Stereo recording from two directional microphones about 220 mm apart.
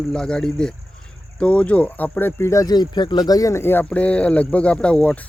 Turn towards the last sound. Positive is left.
turn(degrees=5)  # may be behind; listen again after turning